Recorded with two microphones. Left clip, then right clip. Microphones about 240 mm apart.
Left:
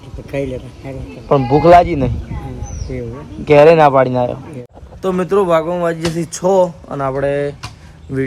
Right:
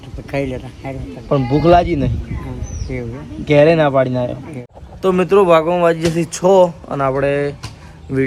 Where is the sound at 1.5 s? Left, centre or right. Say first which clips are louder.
Left 4 dB; left.